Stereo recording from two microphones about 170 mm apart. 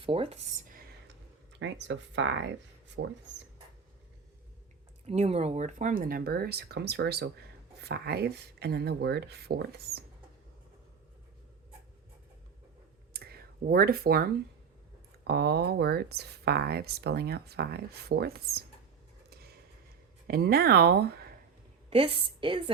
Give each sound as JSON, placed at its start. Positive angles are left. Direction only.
{"t": 0.0, "sound": "speech", "side_deg": -35}
{"t": 0.7, "sound": "a sound", "side_deg": -60}
{"t": 1.6, "sound": "speech", "side_deg": -90}
{"t": 5.0, "sound": "speech", "side_deg": -40}
{"t": 13.1, "sound": "speech", "side_deg": -65}
{"t": 15.3, "sound": "speech", "side_deg": -75}
{"t": 19.3, "sound": "a sound", "side_deg": -65}
{"t": 20.2, "sound": "speech", "side_deg": -65}
{"t": 21.8, "sound": "a woman's voice", "side_deg": -30}